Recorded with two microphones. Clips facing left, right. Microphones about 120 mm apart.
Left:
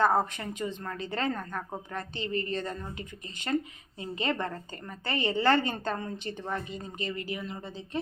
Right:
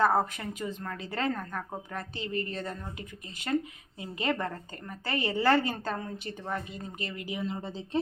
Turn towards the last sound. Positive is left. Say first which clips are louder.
# right 4 dB
turn(degrees=-30)  # may be behind; listen again after turning